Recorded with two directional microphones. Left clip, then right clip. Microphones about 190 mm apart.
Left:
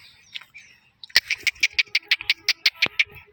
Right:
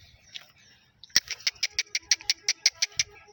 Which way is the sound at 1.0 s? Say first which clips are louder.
Left 6 dB; 25° right (ahead or behind).